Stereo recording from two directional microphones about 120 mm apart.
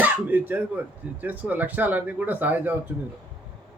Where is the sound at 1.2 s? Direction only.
15° right (ahead or behind).